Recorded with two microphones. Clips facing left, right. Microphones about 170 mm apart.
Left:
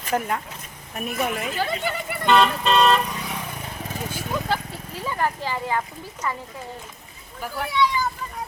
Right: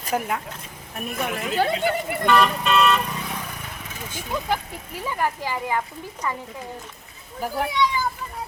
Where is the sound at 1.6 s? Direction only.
55° right (ahead or behind).